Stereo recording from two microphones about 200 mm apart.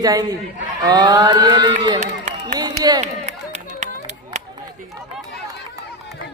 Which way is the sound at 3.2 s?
35° right (ahead or behind).